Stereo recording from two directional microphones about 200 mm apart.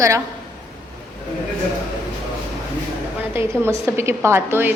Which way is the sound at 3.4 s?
10° right (ahead or behind).